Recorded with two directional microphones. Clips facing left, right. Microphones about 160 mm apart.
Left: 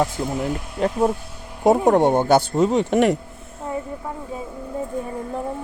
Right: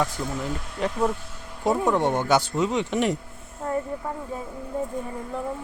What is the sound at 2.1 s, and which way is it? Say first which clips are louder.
Speech: left 5 dB; 55° left (ahead or behind).